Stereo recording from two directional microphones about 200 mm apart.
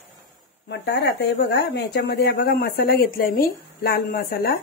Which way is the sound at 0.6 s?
60° left (ahead or behind).